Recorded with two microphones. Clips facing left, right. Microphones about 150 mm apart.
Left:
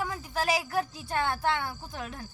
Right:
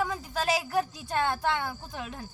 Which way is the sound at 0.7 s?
20° right (ahead or behind).